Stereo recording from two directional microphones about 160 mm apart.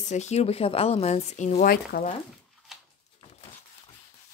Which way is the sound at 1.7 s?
70° left (ahead or behind).